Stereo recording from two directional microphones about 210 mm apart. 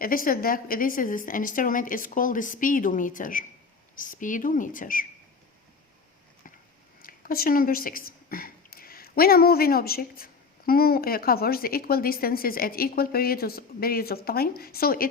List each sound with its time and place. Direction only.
0.0 s speech: 45° left (ahead or behind)
7.0 s speech: 45° left (ahead or behind)